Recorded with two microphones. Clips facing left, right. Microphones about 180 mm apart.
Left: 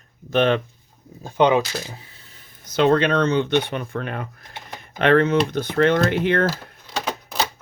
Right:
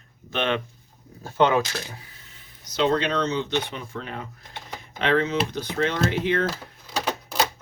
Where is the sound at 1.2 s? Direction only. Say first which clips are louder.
Left 3 dB; 15° left (ahead or behind).